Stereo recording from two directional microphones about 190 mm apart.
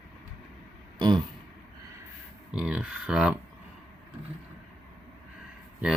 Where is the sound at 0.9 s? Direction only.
25° right (ahead or behind).